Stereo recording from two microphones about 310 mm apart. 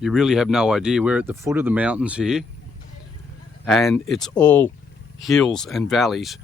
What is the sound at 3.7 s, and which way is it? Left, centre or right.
Speech, centre.